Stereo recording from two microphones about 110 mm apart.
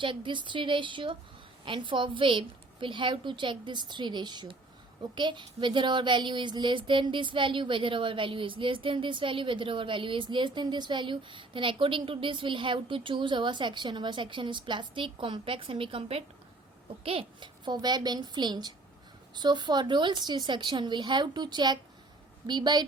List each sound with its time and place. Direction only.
0.0 s a child's voice: 50° right (ahead or behind)
17.7 s a woman's voice: 40° right (ahead or behind)